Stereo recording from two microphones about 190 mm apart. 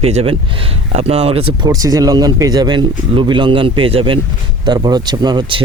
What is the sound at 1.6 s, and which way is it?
Speech, 20° right (ahead or behind).